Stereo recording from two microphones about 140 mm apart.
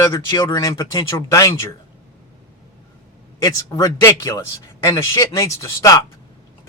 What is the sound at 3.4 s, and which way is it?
A man's voice, 25° left (ahead or behind).